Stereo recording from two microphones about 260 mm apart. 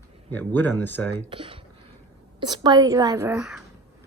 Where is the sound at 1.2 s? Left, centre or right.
Centre.